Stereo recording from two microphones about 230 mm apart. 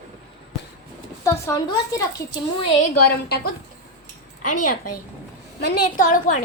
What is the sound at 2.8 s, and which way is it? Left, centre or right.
A woman's voice, left.